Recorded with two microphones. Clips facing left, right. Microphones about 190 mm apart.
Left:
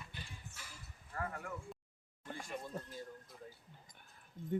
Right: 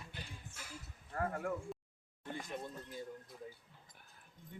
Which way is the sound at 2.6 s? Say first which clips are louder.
Even; 20° right (ahead or behind).